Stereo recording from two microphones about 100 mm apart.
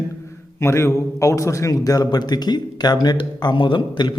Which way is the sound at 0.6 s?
25° left (ahead or behind).